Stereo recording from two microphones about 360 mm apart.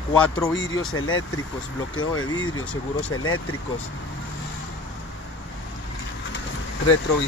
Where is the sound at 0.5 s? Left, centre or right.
Left.